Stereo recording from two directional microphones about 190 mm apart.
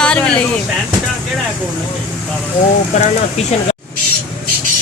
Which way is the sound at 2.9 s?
40° left (ahead or behind).